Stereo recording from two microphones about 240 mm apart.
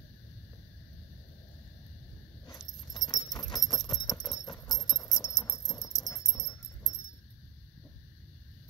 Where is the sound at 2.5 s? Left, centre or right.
Centre.